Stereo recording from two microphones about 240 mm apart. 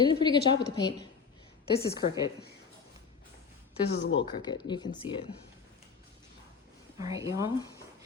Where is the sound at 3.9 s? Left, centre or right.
Left.